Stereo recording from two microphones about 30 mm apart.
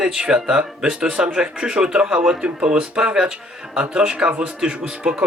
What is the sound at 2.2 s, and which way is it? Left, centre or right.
Speech, centre.